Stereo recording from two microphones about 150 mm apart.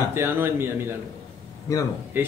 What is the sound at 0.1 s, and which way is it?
Speech, 15° right (ahead or behind).